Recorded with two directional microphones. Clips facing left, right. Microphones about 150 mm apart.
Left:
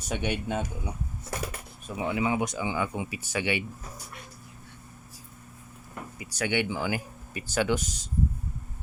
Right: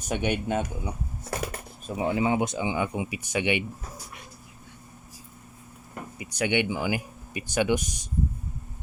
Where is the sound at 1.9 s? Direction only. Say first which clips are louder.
Right 3 dB; 30° right (ahead or behind).